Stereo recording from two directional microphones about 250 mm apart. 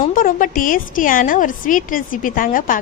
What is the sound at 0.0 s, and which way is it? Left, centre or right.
A woman's voice, left.